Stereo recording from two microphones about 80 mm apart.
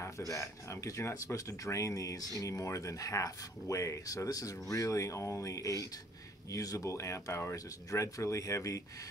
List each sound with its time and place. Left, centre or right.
0.3 s speech: left